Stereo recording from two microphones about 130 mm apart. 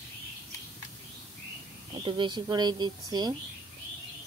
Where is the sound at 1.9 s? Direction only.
40° right (ahead or behind).